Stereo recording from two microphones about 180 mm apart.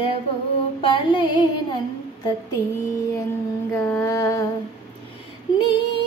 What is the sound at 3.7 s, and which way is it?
Mantra, 15° left (ahead or behind).